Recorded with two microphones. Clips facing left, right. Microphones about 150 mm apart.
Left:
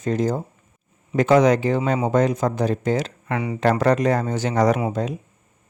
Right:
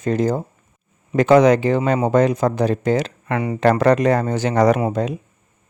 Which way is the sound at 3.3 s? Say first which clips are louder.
Right 3 dB; 50° right (ahead or behind).